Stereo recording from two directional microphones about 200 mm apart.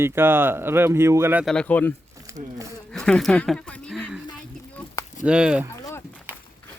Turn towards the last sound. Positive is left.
turn(degrees=-5)  # may be behind; listen again after turning